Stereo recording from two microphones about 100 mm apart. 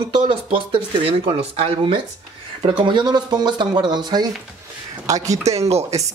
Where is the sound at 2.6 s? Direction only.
55° right (ahead or behind).